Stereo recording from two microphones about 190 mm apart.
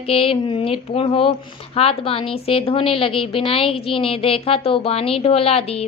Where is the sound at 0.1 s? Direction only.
30° left (ahead or behind).